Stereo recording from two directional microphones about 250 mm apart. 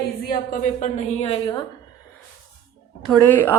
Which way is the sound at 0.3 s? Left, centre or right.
Left.